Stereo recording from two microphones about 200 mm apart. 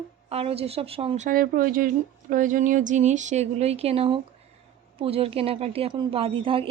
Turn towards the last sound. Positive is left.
turn(degrees=-25)  # may be behind; listen again after turning